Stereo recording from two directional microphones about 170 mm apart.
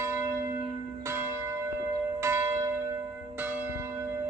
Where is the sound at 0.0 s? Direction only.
15° right (ahead or behind).